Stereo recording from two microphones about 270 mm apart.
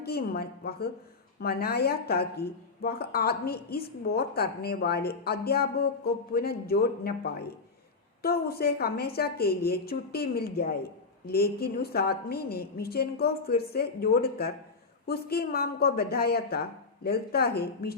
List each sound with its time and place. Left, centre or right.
0.0 s a woman's voice: left